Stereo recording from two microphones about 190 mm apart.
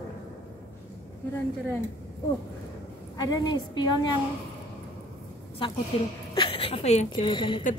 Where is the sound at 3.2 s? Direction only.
20° left (ahead or behind).